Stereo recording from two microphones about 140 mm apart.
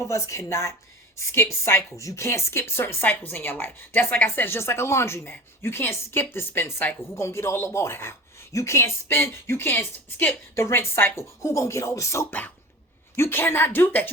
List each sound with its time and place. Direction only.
0.0 s speech: 20° left (ahead or behind)